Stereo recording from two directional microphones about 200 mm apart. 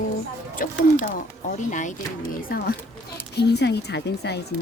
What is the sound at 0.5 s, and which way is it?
Speech, 45° left (ahead or behind).